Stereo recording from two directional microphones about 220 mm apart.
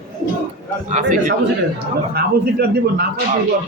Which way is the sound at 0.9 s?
35° right (ahead or behind).